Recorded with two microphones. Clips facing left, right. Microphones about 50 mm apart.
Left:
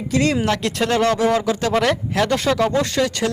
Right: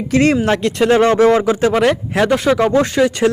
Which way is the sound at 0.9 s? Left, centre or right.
Right.